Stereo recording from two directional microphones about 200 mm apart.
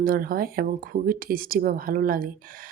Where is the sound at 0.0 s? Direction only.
45° right (ahead or behind).